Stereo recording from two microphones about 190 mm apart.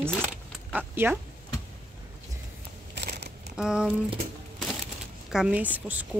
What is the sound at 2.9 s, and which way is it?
Crunch, 60° right (ahead or behind).